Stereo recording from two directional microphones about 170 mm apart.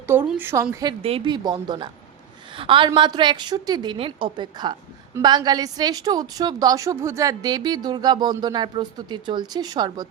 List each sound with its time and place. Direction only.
0.1 s a woman's voice: 10° right (ahead or behind)
1.0 s a woman's voice: 30° right (ahead or behind)